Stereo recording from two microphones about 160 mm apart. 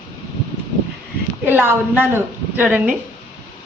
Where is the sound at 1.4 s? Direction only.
10° right (ahead or behind).